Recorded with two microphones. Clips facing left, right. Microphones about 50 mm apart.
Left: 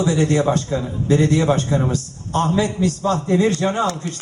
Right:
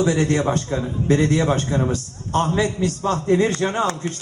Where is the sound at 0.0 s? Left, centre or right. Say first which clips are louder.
Left 1 dB; right.